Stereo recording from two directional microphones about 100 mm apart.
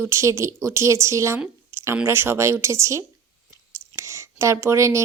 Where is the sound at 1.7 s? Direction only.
25° right (ahead or behind).